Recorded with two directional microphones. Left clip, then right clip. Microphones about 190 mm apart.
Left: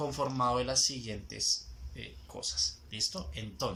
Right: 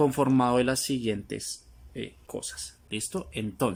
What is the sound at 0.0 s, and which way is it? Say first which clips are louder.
Speech: right 8 dB; 55° right (ahead or behind).